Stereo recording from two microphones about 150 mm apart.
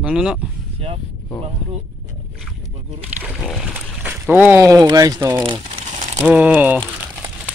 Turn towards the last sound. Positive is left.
turn(degrees=-10)  # may be behind; listen again after turning